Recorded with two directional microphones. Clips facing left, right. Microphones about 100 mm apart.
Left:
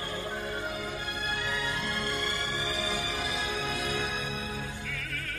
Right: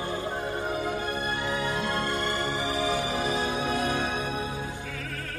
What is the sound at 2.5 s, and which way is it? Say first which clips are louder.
Music: right 5 dB; 25° right (ahead or behind).